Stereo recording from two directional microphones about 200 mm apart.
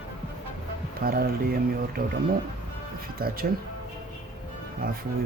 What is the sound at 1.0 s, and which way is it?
Speech, 50° right (ahead or behind).